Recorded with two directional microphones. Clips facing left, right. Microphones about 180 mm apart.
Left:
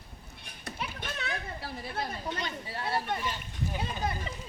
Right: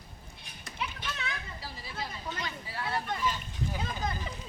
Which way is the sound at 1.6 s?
55° left (ahead or behind).